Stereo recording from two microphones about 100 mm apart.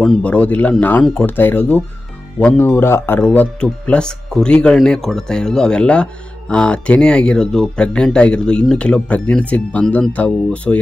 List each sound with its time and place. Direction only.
0.2 s speech: 15° left (ahead or behind)
3.3 s speech: 10° left (ahead or behind)